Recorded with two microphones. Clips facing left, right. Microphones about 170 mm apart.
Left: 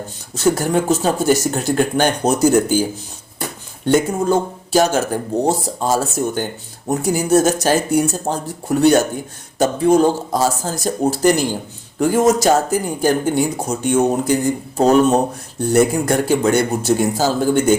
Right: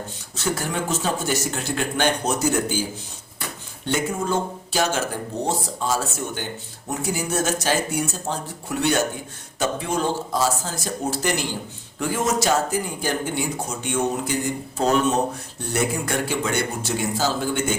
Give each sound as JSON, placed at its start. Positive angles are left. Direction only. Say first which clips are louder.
{"t": 0.3, "sound": "speech", "louder": "left 9 dB", "side_deg": 40}
{"t": 3.8, "sound": "speech", "louder": "left 8 dB", "side_deg": 40}